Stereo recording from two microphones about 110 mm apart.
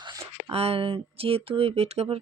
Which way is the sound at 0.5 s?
65° right (ahead or behind).